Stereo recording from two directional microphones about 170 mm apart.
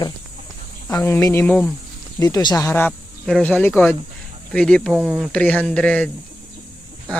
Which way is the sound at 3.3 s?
5° left (ahead or behind).